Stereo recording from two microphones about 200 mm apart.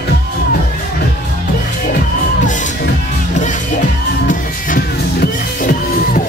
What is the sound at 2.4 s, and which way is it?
Music, 40° left (ahead or behind).